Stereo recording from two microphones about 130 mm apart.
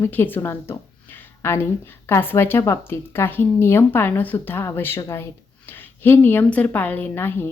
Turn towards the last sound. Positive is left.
turn(degrees=15)  # may be behind; listen again after turning